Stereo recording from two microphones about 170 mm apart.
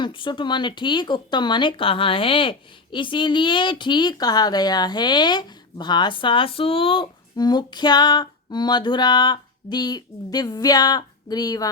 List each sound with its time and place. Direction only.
0.0 s speech: 30° left (ahead or behind)